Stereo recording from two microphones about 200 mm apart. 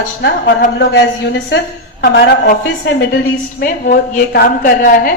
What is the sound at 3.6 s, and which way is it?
A woman's voice, 45° left (ahead or behind).